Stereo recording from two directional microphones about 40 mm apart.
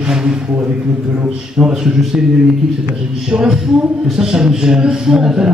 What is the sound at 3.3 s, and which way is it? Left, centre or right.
Speech, centre.